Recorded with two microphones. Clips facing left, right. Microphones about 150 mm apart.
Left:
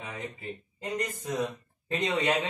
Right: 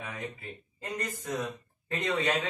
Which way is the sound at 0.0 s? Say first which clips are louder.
Left 1 dB; 25° left (ahead or behind).